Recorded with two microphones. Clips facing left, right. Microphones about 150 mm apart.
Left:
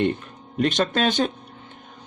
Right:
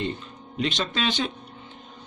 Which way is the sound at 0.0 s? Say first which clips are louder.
Left 7 dB; 55° left (ahead or behind).